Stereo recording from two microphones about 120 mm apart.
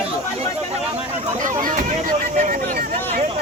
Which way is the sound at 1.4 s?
90° right.